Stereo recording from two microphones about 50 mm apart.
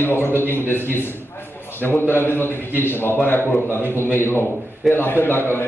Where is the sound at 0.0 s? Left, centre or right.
Left.